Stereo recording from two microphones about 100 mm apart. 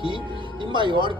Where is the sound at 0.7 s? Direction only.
55° right (ahead or behind).